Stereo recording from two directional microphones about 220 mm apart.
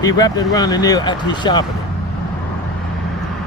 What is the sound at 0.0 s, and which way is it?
Speech, 15° left (ahead or behind).